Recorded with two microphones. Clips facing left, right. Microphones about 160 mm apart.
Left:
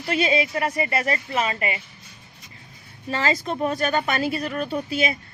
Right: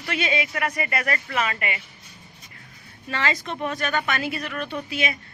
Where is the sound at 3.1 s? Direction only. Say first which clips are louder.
Left 3 dB; 35° left (ahead or behind).